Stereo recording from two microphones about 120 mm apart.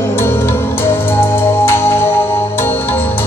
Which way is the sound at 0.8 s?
20° left (ahead or behind).